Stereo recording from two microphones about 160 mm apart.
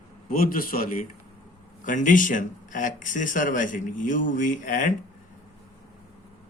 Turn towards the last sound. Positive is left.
turn(degrees=55)  # may be behind; listen again after turning